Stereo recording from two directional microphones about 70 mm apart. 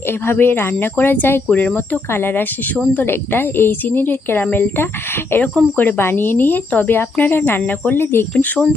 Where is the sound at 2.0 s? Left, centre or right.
Left.